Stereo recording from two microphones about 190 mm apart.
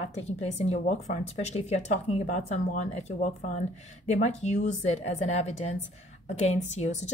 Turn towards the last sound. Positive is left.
turn(degrees=35)  # may be behind; listen again after turning